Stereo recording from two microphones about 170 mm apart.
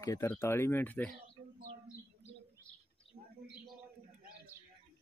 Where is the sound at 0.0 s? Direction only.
20° left (ahead or behind).